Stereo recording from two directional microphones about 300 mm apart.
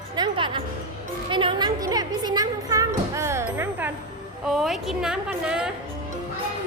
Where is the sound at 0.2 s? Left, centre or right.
Centre.